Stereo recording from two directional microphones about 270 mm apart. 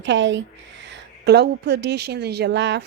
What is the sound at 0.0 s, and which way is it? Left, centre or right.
A woman's voice, right.